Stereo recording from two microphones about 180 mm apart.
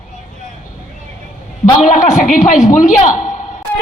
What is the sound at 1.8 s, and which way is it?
Speech, 45° left (ahead or behind).